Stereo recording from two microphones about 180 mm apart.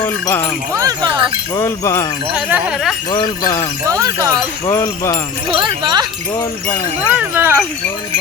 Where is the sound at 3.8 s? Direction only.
20° right (ahead or behind).